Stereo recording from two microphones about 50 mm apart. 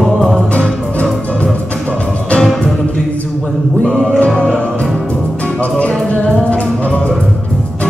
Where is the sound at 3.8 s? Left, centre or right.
Centre.